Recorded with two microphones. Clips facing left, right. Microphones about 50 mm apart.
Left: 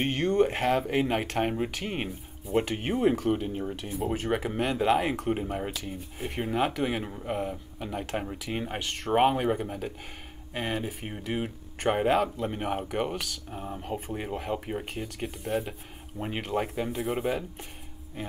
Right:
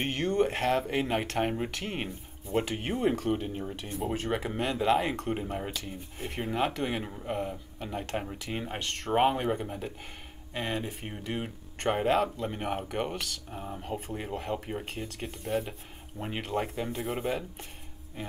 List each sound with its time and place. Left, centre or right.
0.0 s a sound: centre
0.8 s speech: centre
3.2 s speech: left
3.9 s speech: centre
14.1 s speech: centre